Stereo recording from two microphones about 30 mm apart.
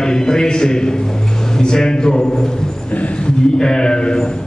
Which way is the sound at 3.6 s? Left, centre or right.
Left.